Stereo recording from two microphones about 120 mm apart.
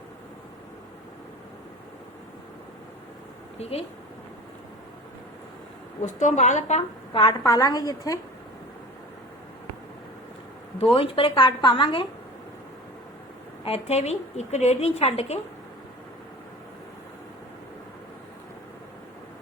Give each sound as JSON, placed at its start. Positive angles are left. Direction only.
{"t": 3.6, "sound": "a woman's voice", "side_deg": 55}
{"t": 6.0, "sound": "speech", "side_deg": 90}
{"t": 7.1, "sound": "a woman's voice", "side_deg": 45}
{"t": 10.9, "sound": "speech", "side_deg": 50}
{"t": 13.7, "sound": "a woman's voice", "side_deg": 60}